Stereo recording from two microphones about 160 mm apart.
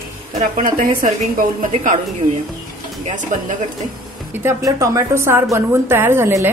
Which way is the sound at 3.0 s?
50° right (ahead or behind).